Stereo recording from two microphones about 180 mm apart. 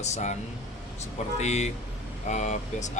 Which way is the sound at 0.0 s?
40° left (ahead or behind).